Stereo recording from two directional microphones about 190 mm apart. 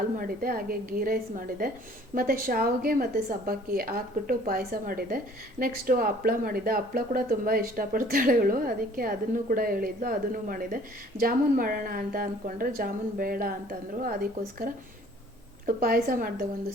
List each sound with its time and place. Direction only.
0.2 s a woman's voice: 50° right (ahead or behind)